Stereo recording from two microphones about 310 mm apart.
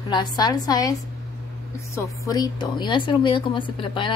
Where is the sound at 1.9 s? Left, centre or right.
Centre.